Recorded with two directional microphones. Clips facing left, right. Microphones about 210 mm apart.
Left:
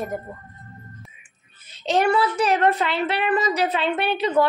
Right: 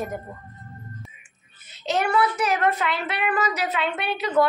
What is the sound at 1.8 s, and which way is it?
A woman's voice, 30° left (ahead or behind).